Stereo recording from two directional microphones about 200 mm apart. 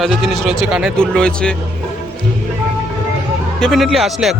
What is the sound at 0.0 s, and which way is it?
Speech, centre (ahead or behind).